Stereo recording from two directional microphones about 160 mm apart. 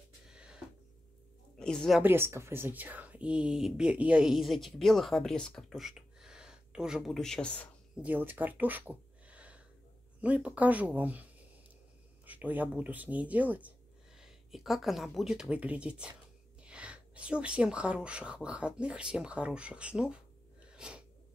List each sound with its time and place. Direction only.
0.3 s a sound: 5° right (ahead or behind)
1.6 s a woman's voice: 5° left (ahead or behind)
2.0 s speech: 15° right (ahead or behind); by 7.6 s 5° left (ahead or behind)
7.9 s speech: 10° right (ahead or behind)
12.3 s speech: 10° right (ahead or behind)
20.7 s sneeze: 5° right (ahead or behind)